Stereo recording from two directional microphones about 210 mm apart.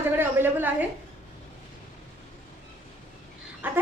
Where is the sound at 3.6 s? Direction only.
10° right (ahead or behind).